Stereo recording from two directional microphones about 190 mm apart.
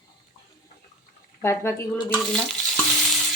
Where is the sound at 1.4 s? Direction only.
15° left (ahead or behind).